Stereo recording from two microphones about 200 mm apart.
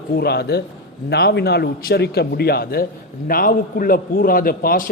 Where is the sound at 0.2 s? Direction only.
55° left (ahead or behind).